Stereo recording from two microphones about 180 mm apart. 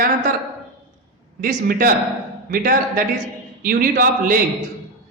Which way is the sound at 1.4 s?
50° right (ahead or behind).